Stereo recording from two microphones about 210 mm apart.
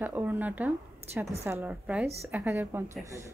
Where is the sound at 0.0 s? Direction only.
10° right (ahead or behind).